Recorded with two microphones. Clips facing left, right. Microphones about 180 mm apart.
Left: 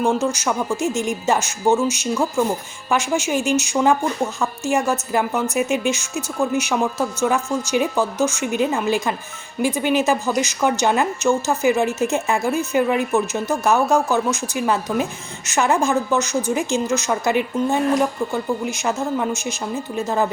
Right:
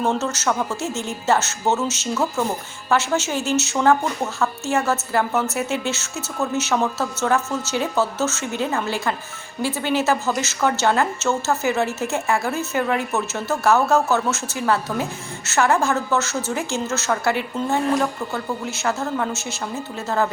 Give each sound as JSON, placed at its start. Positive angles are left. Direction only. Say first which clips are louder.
{"t": 0.0, "sound": "a woman's voice", "louder": "left 2 dB", "side_deg": 10}